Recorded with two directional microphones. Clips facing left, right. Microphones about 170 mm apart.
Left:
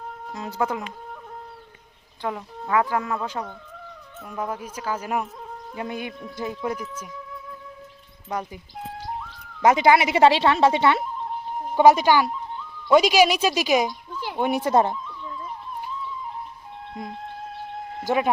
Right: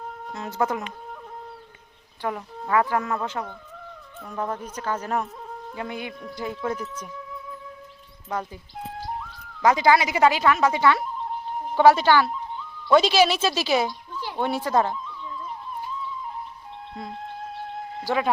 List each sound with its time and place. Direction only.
0.3 s speech: 15° left (ahead or behind)
2.3 s speech: centre (ahead or behind)
2.7 s speech: 10° left (ahead or behind)
9.6 s speech: 20° left (ahead or behind)
17.0 s speech: 15° left (ahead or behind)